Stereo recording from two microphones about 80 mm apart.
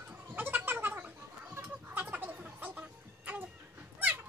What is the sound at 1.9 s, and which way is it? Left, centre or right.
Music, right.